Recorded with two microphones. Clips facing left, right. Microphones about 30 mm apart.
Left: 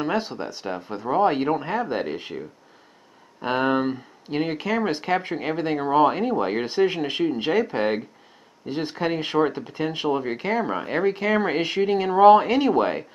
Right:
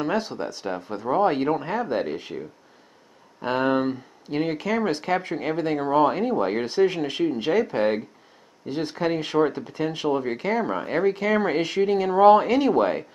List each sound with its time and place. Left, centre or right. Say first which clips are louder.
0.0 s speech: even; centre